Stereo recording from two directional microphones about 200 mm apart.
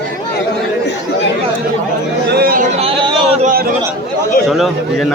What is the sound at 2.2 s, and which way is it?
Chatter, 50° right (ahead or behind).